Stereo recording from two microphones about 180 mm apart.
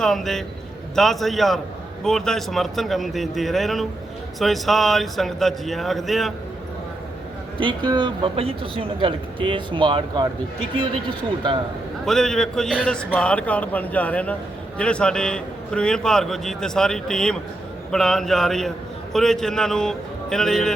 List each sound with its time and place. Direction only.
0.0 s a man's voice: centre (ahead or behind)
7.6 s speech: 25° right (ahead or behind)
12.0 s a man's voice: centre (ahead or behind)